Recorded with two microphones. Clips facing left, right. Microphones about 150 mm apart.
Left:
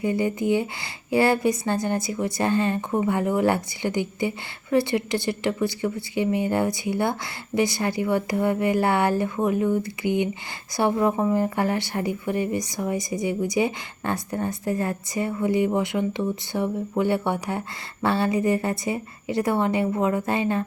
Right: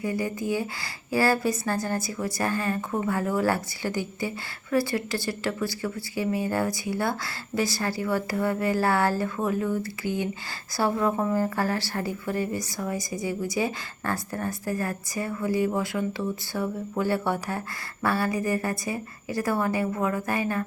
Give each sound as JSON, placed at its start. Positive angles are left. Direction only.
{"t": 0.0, "sound": "a woman's voice", "side_deg": 25}